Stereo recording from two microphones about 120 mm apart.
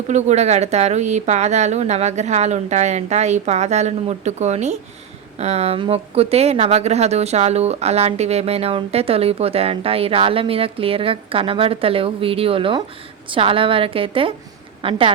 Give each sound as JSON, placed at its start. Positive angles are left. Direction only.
{"t": 0.1, "sound": "a woman's voice", "side_deg": -70}